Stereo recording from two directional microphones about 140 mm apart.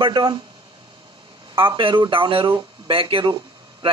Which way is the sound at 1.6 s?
40° right (ahead or behind).